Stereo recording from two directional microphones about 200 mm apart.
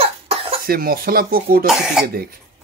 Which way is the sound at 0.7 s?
45° right (ahead or behind).